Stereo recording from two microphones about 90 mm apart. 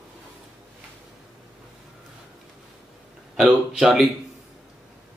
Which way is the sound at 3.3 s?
5° right (ahead or behind).